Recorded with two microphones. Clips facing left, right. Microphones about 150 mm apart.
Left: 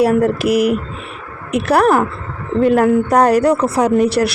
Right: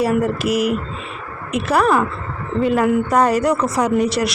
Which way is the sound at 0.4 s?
10° left (ahead or behind).